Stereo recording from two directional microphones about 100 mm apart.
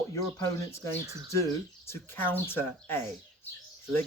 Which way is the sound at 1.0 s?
30° right (ahead or behind).